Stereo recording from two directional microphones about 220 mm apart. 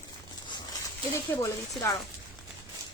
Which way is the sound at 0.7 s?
15° left (ahead or behind).